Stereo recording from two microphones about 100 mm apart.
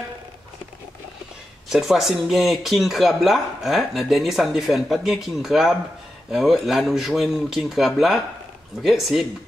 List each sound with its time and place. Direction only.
1.7 s speech: 5° right (ahead or behind)